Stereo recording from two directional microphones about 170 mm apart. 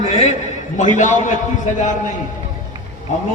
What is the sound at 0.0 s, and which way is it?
A man's voice, 45° left (ahead or behind).